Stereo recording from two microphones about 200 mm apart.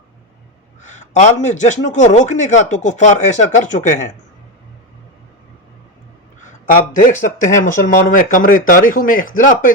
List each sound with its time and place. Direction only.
0.9 s a man's voice: 40° left (ahead or behind)
7.0 s a man's voice: 45° left (ahead or behind)